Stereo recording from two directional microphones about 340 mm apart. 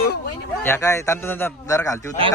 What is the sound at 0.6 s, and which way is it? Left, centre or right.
A man's voice, centre.